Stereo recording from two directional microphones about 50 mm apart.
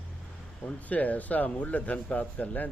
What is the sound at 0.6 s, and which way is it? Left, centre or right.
Speech, left.